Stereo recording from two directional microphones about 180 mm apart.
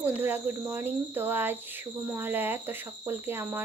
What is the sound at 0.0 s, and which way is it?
Speech, 10° right (ahead or behind).